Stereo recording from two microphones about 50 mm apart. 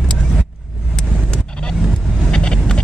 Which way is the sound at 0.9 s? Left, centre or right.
Centre.